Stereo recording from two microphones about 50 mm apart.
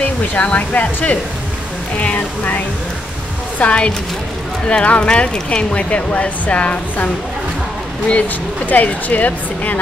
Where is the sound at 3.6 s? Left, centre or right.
Left.